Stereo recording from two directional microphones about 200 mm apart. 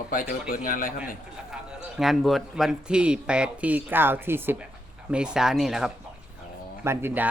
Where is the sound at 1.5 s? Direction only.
5° right (ahead or behind).